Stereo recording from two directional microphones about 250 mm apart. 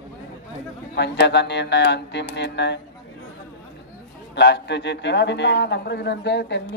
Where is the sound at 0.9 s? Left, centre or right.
Left.